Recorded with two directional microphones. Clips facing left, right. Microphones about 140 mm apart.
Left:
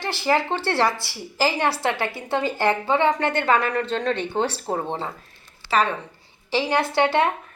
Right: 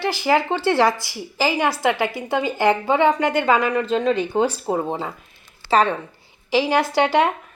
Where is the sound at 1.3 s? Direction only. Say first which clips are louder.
Right 2 dB; centre (ahead or behind).